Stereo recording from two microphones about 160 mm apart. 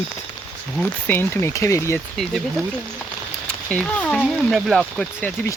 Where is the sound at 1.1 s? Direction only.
15° left (ahead or behind).